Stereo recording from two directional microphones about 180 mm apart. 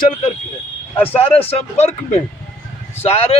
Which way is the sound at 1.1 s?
35° left (ahead or behind).